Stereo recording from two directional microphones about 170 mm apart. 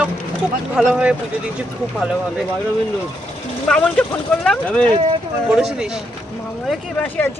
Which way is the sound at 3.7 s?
5° left (ahead or behind).